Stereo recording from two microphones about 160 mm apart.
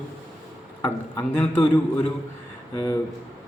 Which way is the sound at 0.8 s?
10° left (ahead or behind).